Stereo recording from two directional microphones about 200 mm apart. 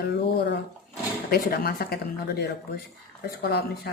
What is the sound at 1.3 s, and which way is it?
Speech, 50° left (ahead or behind).